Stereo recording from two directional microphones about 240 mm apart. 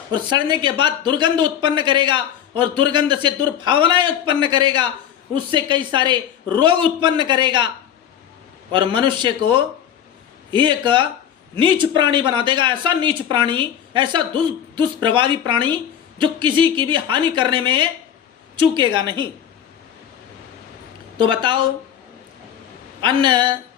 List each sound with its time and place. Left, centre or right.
0.1 s speech: centre
8.7 s speech: centre
21.2 s speech: centre
23.0 s speech: centre